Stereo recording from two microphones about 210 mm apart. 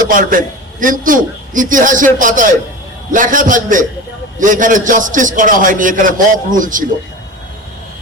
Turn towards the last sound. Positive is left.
turn(degrees=-40)  # may be behind; listen again after turning